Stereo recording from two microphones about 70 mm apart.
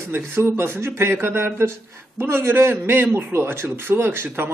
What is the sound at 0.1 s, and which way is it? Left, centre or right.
A man's voice, right.